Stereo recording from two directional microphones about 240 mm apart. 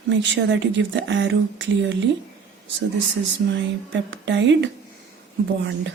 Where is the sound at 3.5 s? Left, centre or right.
Right.